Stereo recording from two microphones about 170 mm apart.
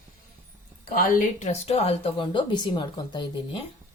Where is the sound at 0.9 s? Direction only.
55° left (ahead or behind); by 3.6 s 25° left (ahead or behind).